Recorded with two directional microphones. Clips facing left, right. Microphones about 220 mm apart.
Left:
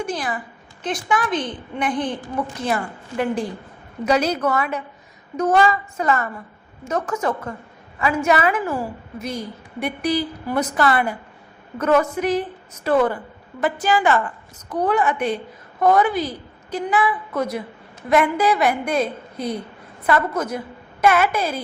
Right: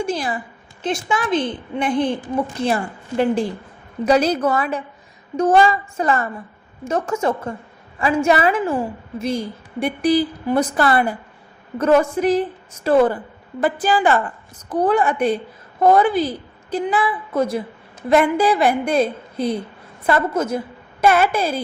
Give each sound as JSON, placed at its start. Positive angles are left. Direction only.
{"t": 0.0, "sound": "a woman's voice", "side_deg": -25}